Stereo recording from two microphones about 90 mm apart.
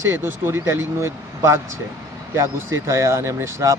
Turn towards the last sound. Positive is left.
turn(degrees=-35)  # may be behind; listen again after turning